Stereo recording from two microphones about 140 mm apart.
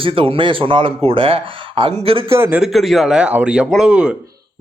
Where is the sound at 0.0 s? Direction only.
40° right (ahead or behind).